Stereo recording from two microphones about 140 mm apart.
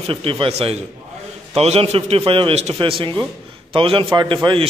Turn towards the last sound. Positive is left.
turn(degrees=-35)  # may be behind; listen again after turning